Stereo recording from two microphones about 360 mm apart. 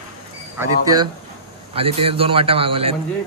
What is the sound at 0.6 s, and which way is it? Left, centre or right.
A man's voice, centre.